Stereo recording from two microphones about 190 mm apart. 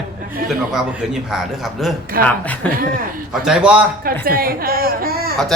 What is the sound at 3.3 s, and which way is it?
Speech, 5° right (ahead or behind).